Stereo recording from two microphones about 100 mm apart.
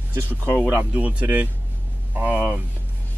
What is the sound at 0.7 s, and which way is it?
Speech, 15° right (ahead or behind).